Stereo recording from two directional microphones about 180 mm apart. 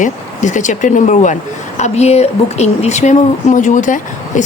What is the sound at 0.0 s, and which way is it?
Speech, 45° left (ahead or behind).